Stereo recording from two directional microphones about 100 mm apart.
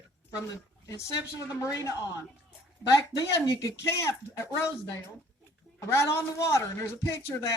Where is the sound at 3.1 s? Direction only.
35° left (ahead or behind).